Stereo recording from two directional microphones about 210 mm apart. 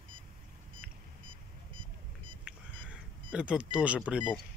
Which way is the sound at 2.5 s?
5° right (ahead or behind).